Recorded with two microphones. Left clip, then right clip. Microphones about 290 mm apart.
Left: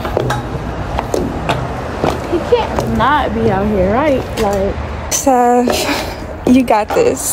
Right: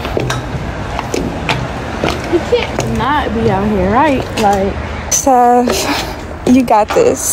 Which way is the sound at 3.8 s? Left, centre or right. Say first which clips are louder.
Right 4 dB; centre.